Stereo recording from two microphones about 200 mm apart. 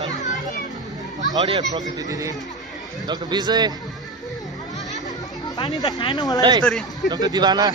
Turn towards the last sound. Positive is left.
turn(degrees=-20)  # may be behind; listen again after turning